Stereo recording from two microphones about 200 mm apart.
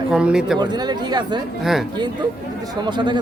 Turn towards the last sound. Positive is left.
turn(degrees=-25)  # may be behind; listen again after turning